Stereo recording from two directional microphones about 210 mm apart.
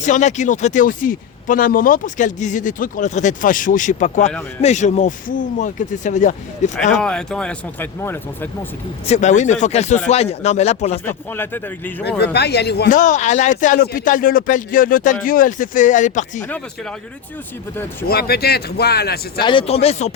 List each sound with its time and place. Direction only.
0.0 s speech: 35° left (ahead or behind)
6.9 s speech: 5° left (ahead or behind)
9.0 s speech: 35° left (ahead or behind)
11.0 s speech: 10° left (ahead or behind)
12.0 s speech: 50° left (ahead or behind); by 16.5 s 35° left (ahead or behind)
18.1 s speech: 50° left (ahead or behind)
19.4 s speech: 25° left (ahead or behind)